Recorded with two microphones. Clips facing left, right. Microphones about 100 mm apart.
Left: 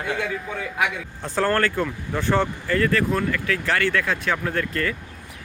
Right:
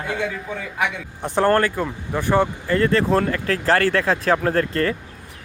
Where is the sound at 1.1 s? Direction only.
20° right (ahead or behind).